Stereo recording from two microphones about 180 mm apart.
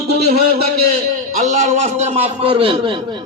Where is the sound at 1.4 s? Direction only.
40° right (ahead or behind).